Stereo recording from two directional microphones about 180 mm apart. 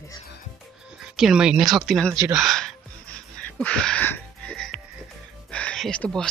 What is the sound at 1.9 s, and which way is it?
Speech, 5° left (ahead or behind).